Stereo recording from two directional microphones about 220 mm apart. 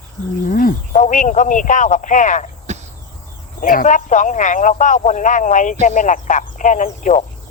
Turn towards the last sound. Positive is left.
turn(degrees=30)  # may be behind; listen again after turning